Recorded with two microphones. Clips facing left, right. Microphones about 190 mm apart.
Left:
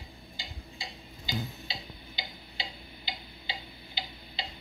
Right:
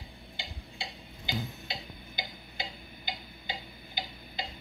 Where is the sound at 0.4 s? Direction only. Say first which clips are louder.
Right 2 dB; 65° right (ahead or behind).